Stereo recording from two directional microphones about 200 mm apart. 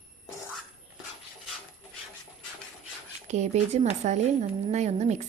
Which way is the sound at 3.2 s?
35° right (ahead or behind).